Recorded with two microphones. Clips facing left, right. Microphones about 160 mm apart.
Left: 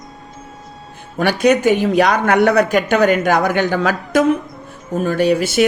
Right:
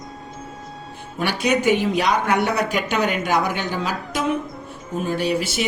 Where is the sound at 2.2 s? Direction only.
75° left (ahead or behind).